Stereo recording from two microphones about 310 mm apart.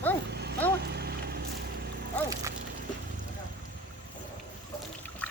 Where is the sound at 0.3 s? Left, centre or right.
Right.